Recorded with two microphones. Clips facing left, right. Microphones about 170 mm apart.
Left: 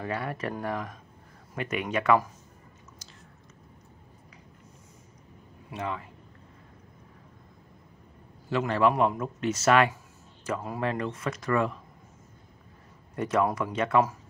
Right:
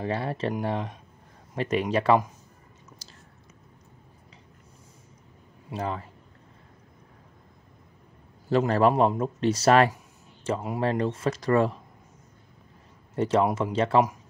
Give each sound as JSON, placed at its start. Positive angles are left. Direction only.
{"t": 0.0, "sound": "a man's voice", "side_deg": -30}
{"t": 3.0, "sound": "chewing", "side_deg": -30}
{"t": 5.7, "sound": "a man's voice", "side_deg": -35}
{"t": 8.5, "sound": "a man's voice", "side_deg": -35}
{"t": 10.4, "sound": "a man's voice", "side_deg": -20}
{"t": 13.1, "sound": "a man's voice", "side_deg": -30}